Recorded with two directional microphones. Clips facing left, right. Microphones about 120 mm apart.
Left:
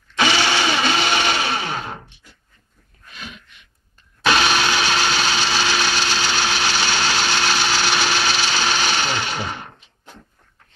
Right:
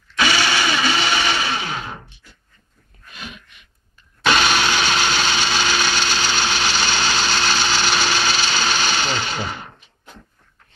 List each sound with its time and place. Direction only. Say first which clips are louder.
0.2 s blender: left 1 dB; 25° left (ahead or behind)
4.3 s vehicle: even; 10° left (ahead or behind)
5.1 s tools: even; 5° left (ahead or behind)
6.1 s a sound: even; 15° left (ahead or behind)